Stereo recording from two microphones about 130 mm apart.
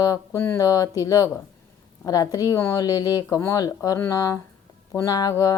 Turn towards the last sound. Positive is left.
turn(degrees=30)  # may be behind; listen again after turning